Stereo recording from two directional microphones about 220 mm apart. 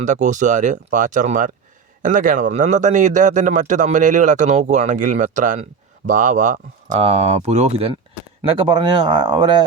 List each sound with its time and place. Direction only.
0.0 s a man's voice: 35° right (ahead or behind); by 9.6 s 20° right (ahead or behind)